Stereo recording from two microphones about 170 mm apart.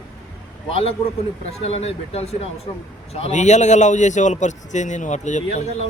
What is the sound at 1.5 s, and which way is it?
A man's voice, 35° left (ahead or behind).